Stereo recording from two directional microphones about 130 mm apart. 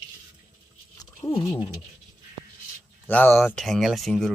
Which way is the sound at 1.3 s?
45° left (ahead or behind).